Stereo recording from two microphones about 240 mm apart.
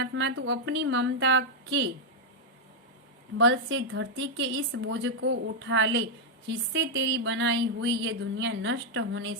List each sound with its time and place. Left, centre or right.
0.0 s speech: right
3.3 s speech: right